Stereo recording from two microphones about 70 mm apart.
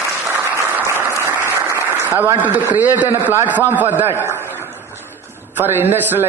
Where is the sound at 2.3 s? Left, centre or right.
Right.